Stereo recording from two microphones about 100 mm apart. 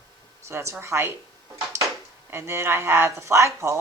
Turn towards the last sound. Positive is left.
turn(degrees=-30)  # may be behind; listen again after turning